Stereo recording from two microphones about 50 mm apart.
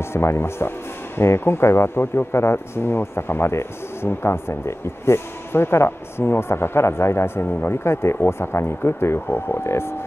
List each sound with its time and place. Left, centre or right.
0.0 s speech: left